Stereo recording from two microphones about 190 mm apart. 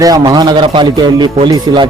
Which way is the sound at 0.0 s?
20° right (ahead or behind).